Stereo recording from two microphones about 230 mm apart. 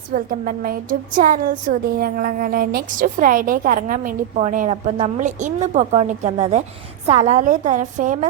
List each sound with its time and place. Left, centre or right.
0.1 s a woman's voice: right